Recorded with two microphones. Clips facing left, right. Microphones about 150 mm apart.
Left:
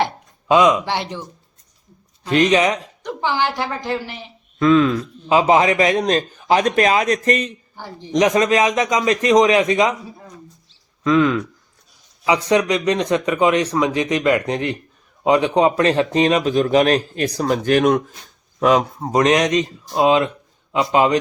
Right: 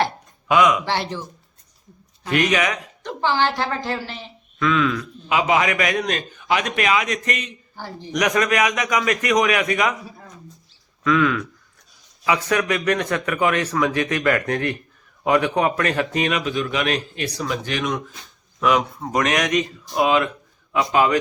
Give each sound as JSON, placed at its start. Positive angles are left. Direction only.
{"t": 0.0, "sound": "a sound", "side_deg": 25}
{"t": 2.2, "sound": "speech", "side_deg": 25}
{"t": 3.0, "sound": "a woman's voice", "side_deg": 15}
{"t": 4.6, "sound": "a man's voice", "side_deg": 35}
{"t": 7.8, "sound": "speech", "side_deg": 15}
{"t": 10.7, "sound": "a sound", "side_deg": 30}
{"t": 12.2, "sound": "a man's voice", "side_deg": 20}
{"t": 18.6, "sound": "speech", "side_deg": 35}